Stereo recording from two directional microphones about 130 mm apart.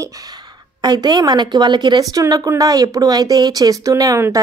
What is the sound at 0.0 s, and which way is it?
A woman's voice, 25° right (ahead or behind).